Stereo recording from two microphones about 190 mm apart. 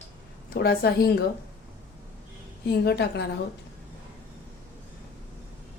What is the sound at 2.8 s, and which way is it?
Speech, 60° left (ahead or behind).